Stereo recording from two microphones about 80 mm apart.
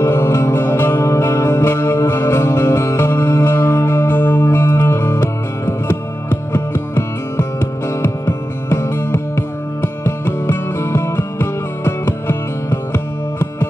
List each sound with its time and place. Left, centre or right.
0.0 s music: left